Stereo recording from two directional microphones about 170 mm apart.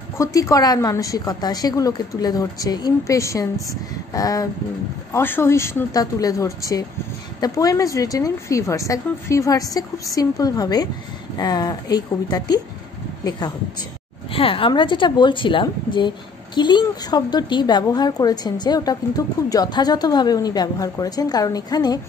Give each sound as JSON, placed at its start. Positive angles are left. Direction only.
{"t": 0.2, "sound": "a woman's voice", "side_deg": 20}
{"t": 14.3, "sound": "a woman's voice", "side_deg": 30}